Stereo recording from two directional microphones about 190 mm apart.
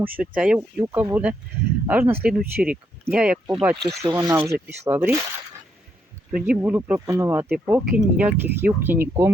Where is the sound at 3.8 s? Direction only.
20° right (ahead or behind).